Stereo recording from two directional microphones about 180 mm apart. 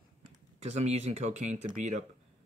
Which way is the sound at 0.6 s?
40° right (ahead or behind).